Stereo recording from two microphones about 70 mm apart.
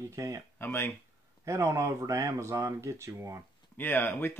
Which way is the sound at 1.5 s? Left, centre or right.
Right.